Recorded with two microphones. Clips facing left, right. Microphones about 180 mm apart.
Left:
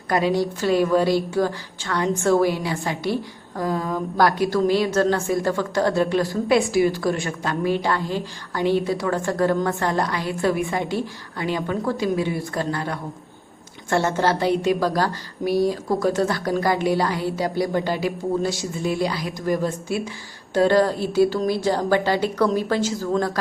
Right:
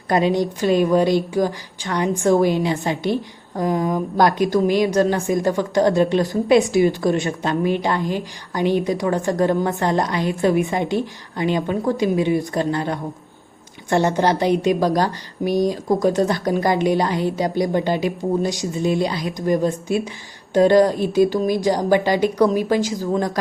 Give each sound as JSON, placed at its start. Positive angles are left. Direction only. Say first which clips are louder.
{"t": 0.1, "sound": "a woman's voice", "louder": "right 2 dB", "side_deg": -20}